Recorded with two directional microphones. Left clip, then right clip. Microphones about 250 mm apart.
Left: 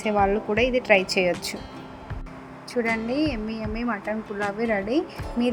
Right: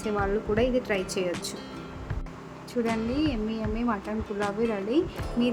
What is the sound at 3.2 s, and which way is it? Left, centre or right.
Music, centre.